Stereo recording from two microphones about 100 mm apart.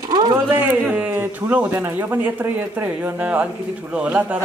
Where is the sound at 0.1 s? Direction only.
45° right (ahead or behind).